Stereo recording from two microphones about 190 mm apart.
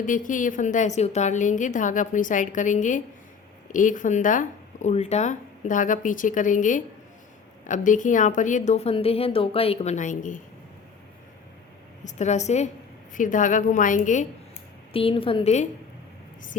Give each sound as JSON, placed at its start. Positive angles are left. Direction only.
{"t": 0.0, "sound": "a woman's voice", "side_deg": 45}
{"t": 12.0, "sound": "a woman's voice", "side_deg": 40}
{"t": 14.9, "sound": "a woman's voice", "side_deg": 30}